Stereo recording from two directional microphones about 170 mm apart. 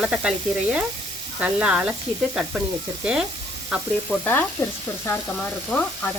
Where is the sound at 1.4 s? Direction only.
5° right (ahead or behind).